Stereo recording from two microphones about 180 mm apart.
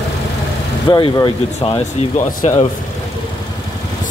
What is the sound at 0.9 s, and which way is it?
Speech, 25° left (ahead or behind).